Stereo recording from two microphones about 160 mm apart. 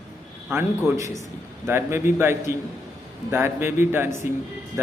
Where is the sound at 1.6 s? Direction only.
15° right (ahead or behind).